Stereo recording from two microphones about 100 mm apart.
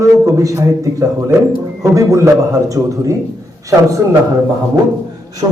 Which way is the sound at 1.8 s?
35° right (ahead or behind).